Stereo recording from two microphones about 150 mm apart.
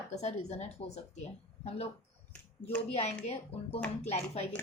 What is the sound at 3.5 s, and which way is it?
Speech, 40° left (ahead or behind).